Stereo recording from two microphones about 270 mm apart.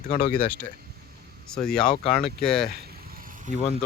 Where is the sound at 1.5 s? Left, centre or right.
Centre.